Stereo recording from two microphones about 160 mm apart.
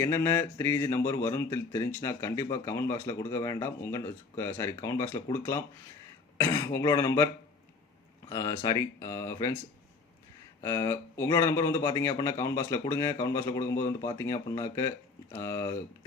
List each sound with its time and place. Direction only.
0.0 s a man's voice: 20° left (ahead or behind)
8.3 s speech: 20° left (ahead or behind)
10.6 s a man's voice: 20° left (ahead or behind)